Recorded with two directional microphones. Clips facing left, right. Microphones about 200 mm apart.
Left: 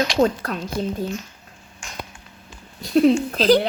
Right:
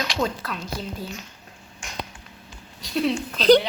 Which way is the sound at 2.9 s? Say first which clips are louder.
Left 8 dB; 45° left (ahead or behind).